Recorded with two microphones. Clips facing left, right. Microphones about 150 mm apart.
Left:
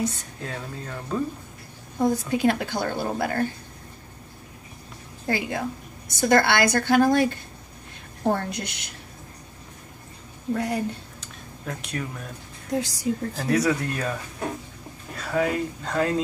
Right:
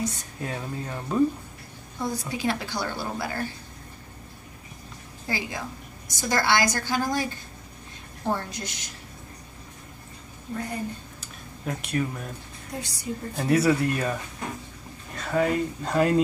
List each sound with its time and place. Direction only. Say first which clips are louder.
0.0 s speech: left 3 dB; 60° left (ahead or behind)
0.4 s speech: right 2 dB; 15° right (ahead or behind)
2.0 s a woman's voice: left 7 dB; 55° left (ahead or behind)
5.2 s a woman's voice: left 5 dB; 60° left (ahead or behind)
10.5 s a woman's voice: left 7 dB; 90° left
11.1 s a sound: left 1 dB; 5° right (ahead or behind)
12.7 s a woman's voice: left 8 dB; 90° left
13.5 s speech: right 2 dB; 5° right (ahead or behind)
15.1 s speech: even; centre (ahead or behind)